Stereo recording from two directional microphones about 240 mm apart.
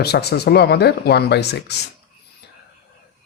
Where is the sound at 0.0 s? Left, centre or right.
Left.